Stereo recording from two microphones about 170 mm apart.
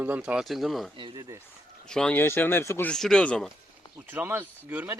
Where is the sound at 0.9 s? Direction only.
25° right (ahead or behind).